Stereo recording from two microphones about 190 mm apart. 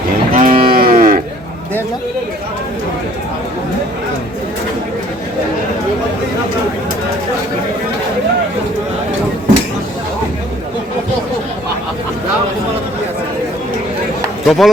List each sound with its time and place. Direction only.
0.3 s cattle: 45° right (ahead or behind)
14.4 s speech: centre (ahead or behind)